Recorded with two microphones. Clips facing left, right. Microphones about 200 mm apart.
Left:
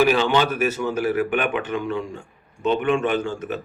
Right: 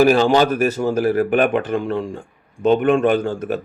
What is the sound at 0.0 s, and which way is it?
Speech, 40° right (ahead or behind).